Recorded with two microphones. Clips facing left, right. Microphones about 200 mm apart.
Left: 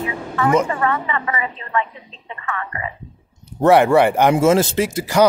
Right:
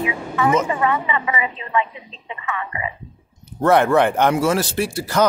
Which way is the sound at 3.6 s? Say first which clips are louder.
Left 3 dB; 15° left (ahead or behind).